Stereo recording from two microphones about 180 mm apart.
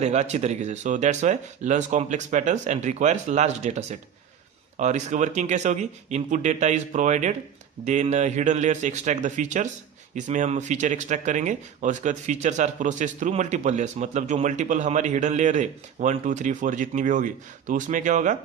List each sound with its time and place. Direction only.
0.0 s speech: 40° right (ahead or behind)